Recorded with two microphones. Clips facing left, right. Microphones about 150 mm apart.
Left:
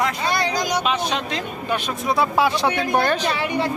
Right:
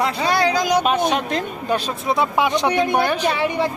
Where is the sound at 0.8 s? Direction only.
50° right (ahead or behind).